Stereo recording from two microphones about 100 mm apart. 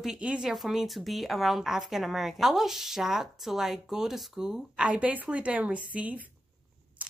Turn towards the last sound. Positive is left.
turn(degrees=-15)  # may be behind; listen again after turning